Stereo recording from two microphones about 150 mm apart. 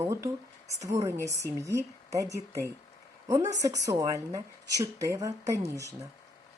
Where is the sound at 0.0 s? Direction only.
20° right (ahead or behind).